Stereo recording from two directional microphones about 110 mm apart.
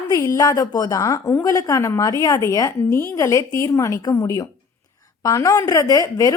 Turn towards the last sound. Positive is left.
turn(degrees=30)  # may be behind; listen again after turning